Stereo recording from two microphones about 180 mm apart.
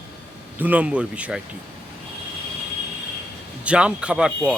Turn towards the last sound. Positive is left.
turn(degrees=-5)  # may be behind; listen again after turning